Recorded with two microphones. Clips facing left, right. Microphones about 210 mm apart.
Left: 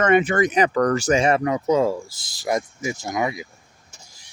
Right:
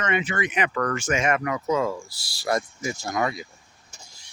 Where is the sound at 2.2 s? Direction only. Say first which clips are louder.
Left 2 dB; 20° left (ahead or behind).